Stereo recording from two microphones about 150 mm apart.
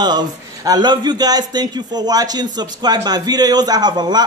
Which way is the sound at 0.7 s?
30° right (ahead or behind).